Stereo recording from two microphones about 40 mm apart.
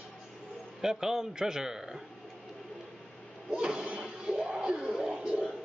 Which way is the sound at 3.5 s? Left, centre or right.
Right.